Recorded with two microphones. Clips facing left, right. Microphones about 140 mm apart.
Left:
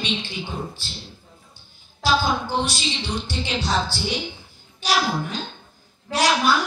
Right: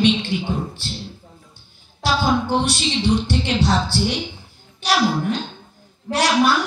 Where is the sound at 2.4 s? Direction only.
65° right (ahead or behind).